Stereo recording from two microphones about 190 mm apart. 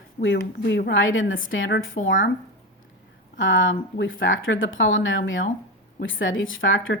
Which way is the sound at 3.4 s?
90° left.